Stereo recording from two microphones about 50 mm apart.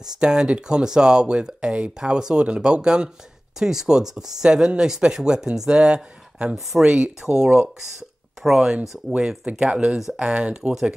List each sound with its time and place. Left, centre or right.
0.2 s speech: centre
6.5 s speech: centre
6.9 s speech: centre
9.5 s speech: right